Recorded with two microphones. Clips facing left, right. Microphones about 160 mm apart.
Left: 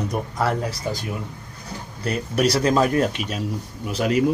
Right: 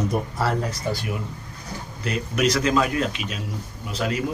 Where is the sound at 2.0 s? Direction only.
35° left (ahead or behind).